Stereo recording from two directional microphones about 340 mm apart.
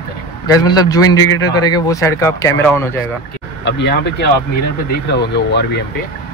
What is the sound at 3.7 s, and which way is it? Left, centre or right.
Speech, left.